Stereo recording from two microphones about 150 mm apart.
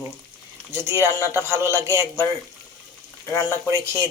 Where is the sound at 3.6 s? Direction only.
20° right (ahead or behind).